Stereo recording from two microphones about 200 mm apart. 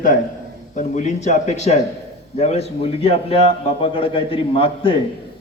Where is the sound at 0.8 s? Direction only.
35° left (ahead or behind).